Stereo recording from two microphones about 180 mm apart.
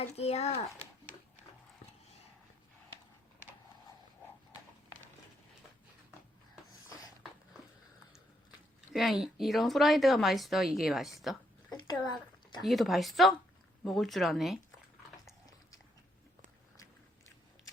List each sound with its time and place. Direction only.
0.0 s a child's voice: 35° left (ahead or behind)
8.9 s speech: centre (ahead or behind)